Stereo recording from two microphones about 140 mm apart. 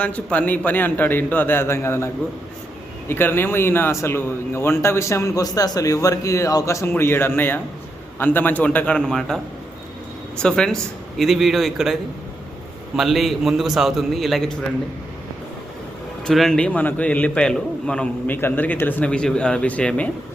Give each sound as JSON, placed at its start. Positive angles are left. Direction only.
{"t": 0.0, "sound": "a man's voice", "side_deg": 10}
{"t": 3.1, "sound": "a man's voice", "side_deg": 15}
{"t": 10.4, "sound": "a man's voice", "side_deg": 5}
{"t": 13.0, "sound": "a man's voice", "side_deg": 0}
{"t": 16.2, "sound": "a man's voice", "side_deg": 5}